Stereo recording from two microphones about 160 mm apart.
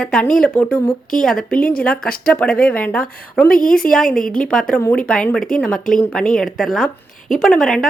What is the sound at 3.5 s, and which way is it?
Speech, 60° left (ahead or behind).